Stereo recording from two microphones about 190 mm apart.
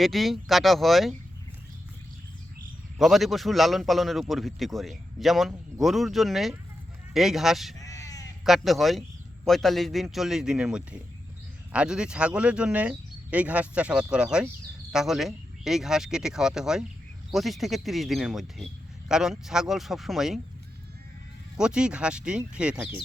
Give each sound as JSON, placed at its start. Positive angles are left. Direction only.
{"t": 0.0, "sound": "speech", "side_deg": 0}
{"t": 3.0, "sound": "speech", "side_deg": 0}
{"t": 7.8, "sound": "crow", "side_deg": 15}
{"t": 8.4, "sound": "speech", "side_deg": 0}
{"t": 21.6, "sound": "speech", "side_deg": -5}